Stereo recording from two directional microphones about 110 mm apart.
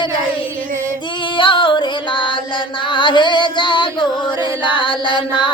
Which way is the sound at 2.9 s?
45° left (ahead or behind).